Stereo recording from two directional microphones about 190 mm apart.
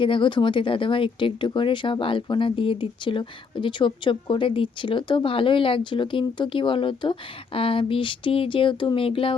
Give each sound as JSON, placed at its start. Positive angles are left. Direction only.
{"t": 0.0, "sound": "speech", "side_deg": 25}